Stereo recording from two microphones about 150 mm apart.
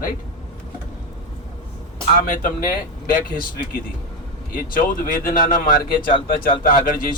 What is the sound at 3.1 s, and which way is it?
Speech, 75° left (ahead or behind).